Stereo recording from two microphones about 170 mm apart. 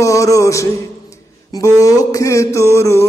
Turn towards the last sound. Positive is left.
turn(degrees=15)  # may be behind; listen again after turning